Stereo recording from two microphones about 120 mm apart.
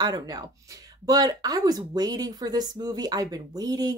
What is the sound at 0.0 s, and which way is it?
Speech, 30° right (ahead or behind).